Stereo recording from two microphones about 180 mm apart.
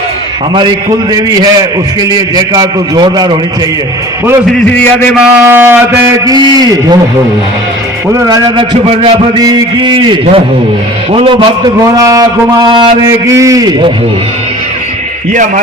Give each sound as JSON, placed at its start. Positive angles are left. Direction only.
{"t": 1.1, "sound": "a man's voice", "side_deg": -20}
{"t": 5.2, "sound": "a man's voice", "side_deg": -10}
{"t": 8.1, "sound": "a man's voice", "side_deg": -20}
{"t": 15.3, "sound": "speech", "side_deg": -45}